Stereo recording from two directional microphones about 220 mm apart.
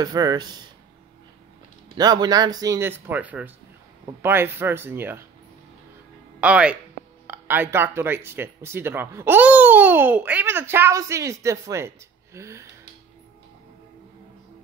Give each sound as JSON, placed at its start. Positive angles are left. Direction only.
{"t": 0.0, "sound": "speech", "side_deg": -15}
{"t": 2.0, "sound": "speech", "side_deg": -20}
{"t": 6.4, "sound": "speech", "side_deg": -5}